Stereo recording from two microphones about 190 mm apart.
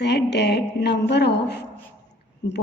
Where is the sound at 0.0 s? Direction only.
60° left (ahead or behind).